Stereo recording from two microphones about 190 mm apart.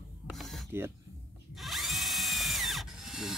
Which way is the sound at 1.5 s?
Centre (ahead or behind).